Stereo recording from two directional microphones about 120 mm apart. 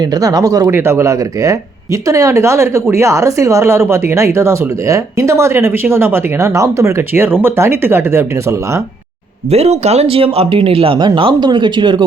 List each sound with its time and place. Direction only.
0.0 s speech: 30° right (ahead or behind)
9.5 s speech: 60° right (ahead or behind); by 12.0 s 40° right (ahead or behind)